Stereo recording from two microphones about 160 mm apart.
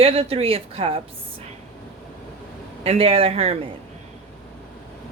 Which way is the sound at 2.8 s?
40° right (ahead or behind).